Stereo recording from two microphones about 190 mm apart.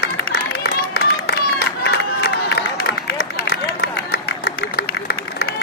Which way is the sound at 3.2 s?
55° left (ahead or behind).